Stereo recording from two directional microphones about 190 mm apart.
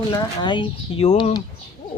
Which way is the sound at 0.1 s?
20° left (ahead or behind).